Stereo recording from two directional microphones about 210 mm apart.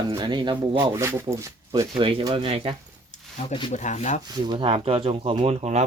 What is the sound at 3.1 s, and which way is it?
Speech, 30° left (ahead or behind).